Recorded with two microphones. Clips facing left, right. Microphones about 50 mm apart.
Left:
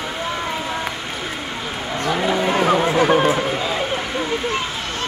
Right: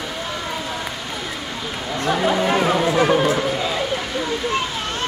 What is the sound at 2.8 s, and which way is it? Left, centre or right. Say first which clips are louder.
Music: left 1 dB; left.